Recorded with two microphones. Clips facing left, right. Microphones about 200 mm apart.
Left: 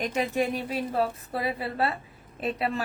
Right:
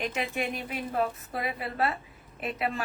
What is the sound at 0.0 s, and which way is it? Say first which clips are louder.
A woman's voice: left 5 dB; 40° left (ahead or behind).